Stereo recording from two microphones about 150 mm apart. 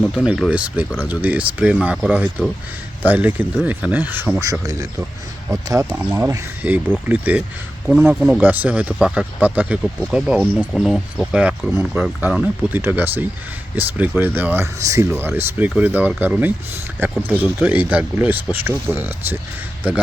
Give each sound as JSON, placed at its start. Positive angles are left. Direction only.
{"t": 0.0, "sound": "speech", "side_deg": -5}
{"t": 4.6, "sound": "speech", "side_deg": -25}